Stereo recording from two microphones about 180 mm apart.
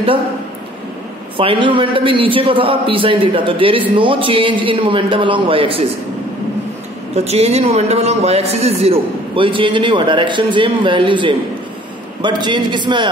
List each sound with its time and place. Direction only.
1.3 s a man's voice: 30° right (ahead or behind)
7.2 s a man's voice: 35° right (ahead or behind)